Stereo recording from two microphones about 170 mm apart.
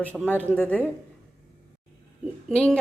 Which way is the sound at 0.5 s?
10° left (ahead or behind).